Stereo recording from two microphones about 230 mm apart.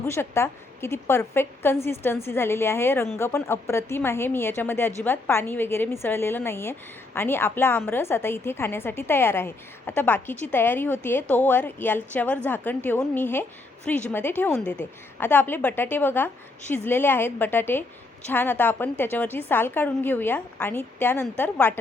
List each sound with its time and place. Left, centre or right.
0.0 s a woman's voice: centre